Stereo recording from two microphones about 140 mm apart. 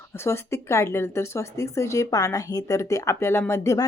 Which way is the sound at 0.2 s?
20° left (ahead or behind).